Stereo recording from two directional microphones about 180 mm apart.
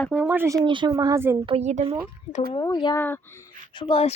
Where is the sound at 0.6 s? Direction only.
25° right (ahead or behind).